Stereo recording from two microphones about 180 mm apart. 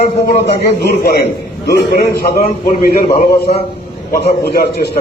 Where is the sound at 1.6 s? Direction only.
60° left (ahead or behind).